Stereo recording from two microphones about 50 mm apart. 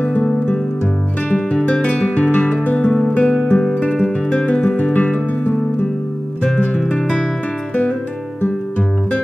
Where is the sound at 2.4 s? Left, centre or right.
Left.